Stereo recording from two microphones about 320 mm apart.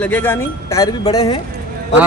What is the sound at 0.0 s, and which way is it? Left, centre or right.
Speech, centre.